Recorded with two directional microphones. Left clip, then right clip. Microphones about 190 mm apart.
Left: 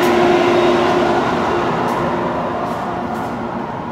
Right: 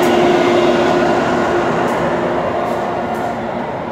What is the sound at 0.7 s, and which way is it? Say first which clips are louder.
Train: right 1 dB; 45° right (ahead or behind).